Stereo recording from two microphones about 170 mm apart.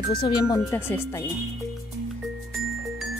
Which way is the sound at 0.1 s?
25° left (ahead or behind).